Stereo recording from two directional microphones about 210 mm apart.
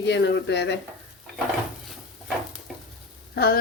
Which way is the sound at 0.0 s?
55° left (ahead or behind).